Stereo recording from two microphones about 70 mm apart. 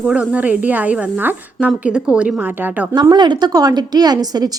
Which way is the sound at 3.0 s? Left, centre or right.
Right.